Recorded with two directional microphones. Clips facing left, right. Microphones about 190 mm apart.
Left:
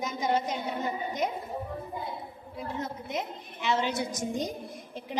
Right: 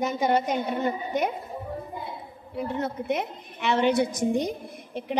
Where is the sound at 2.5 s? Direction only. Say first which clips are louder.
Right 7 dB; 65° right (ahead or behind).